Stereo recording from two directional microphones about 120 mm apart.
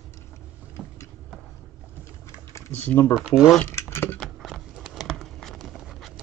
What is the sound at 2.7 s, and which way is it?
Speech, 15° left (ahead or behind).